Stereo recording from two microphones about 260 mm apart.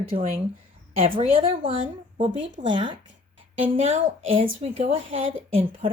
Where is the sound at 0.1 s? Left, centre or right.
Right.